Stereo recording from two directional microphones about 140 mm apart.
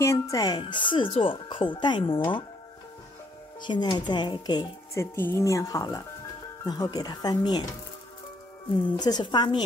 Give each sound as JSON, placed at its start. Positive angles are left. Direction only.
{"t": 0.0, "sound": "speech", "side_deg": 20}
{"t": 3.6, "sound": "speech", "side_deg": 30}
{"t": 4.9, "sound": "speech", "side_deg": 20}
{"t": 9.0, "sound": "speech", "side_deg": 30}